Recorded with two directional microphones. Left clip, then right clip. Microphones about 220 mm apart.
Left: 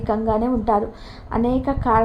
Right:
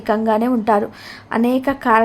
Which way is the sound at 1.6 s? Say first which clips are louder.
Right 4 dB; 35° right (ahead or behind).